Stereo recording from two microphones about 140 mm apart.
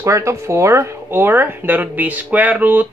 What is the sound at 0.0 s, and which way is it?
Speech, 20° right (ahead or behind).